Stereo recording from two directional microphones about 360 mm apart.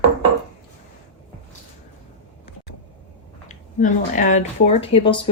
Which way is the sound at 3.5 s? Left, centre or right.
Left.